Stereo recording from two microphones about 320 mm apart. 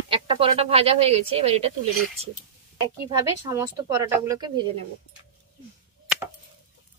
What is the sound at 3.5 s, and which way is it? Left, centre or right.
Speech, centre.